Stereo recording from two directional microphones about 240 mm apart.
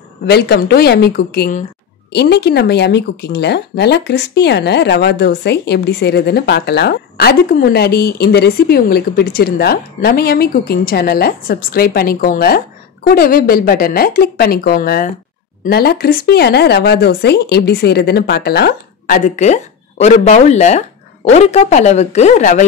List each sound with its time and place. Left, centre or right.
0.3 s speech: left